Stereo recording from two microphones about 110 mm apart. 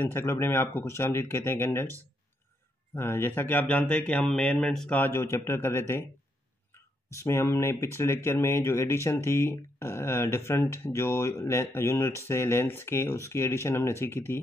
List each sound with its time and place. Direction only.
0.0 s speech: 20° left (ahead or behind)
2.9 s speech: 20° left (ahead or behind); by 4.9 s 5° left (ahead or behind)
4.9 s speech: 20° left (ahead or behind)
7.1 s speech: 25° left (ahead or behind)